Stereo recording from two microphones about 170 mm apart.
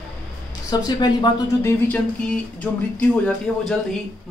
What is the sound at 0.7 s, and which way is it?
Speech, 25° left (ahead or behind).